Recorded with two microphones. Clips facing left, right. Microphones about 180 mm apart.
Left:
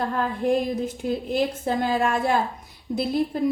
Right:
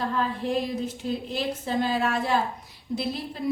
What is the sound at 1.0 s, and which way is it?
A woman's voice, 50° left (ahead or behind).